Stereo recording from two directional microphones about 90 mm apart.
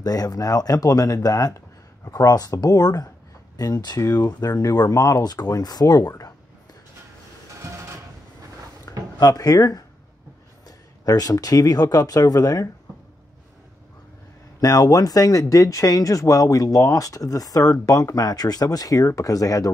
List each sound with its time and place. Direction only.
0.0 s speech: 45° left (ahead or behind)
8.9 s a sound: 40° left (ahead or behind)
9.2 s speech: 45° left (ahead or behind)
11.1 s speech: 45° left (ahead or behind)
14.6 s speech: 45° left (ahead or behind)